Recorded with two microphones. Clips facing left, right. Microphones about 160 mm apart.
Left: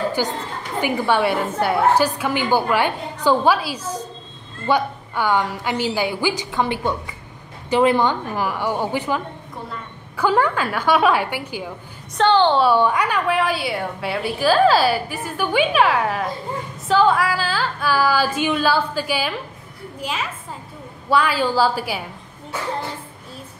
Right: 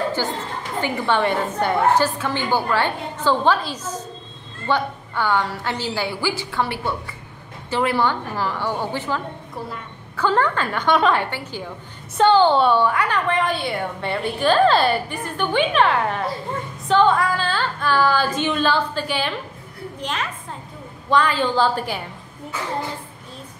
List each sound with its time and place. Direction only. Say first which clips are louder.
0.2 s a woman's voice: left 2 dB; 15° left (ahead or behind)
12.2 s a woman's voice: right 1 dB; 5° right (ahead or behind)
12.7 s a woman's voice: left 1 dB; 15° left (ahead or behind)